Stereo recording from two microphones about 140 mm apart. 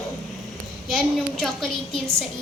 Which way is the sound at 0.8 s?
Centre (ahead or behind).